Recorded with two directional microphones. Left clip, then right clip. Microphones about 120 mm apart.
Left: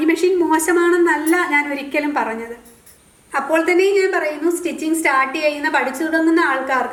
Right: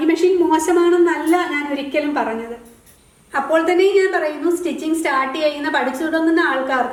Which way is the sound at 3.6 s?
35° left (ahead or behind).